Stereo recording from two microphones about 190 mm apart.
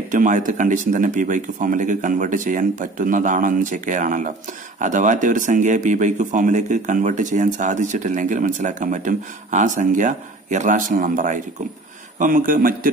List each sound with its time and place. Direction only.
0.1 s speech: 45° right (ahead or behind)